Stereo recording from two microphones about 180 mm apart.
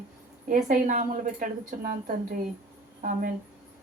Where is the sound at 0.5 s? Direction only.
45° right (ahead or behind).